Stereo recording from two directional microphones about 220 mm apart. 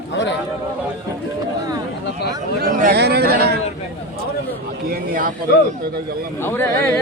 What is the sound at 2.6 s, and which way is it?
A man's voice, 40° right (ahead or behind).